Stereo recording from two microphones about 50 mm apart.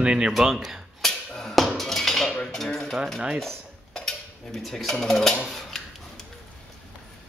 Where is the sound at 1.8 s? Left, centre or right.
Centre.